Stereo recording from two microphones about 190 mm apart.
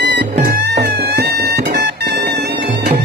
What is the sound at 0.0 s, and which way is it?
Music, 60° right (ahead or behind).